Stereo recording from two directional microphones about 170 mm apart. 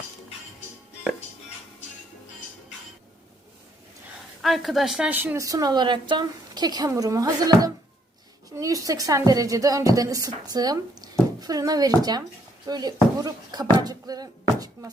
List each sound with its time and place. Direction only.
4.4 s speech: centre (ahead or behind); by 14.8 s 20° right (ahead or behind)